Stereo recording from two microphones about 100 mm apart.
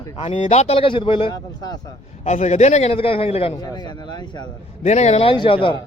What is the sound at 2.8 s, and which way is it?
Speech, 80° left.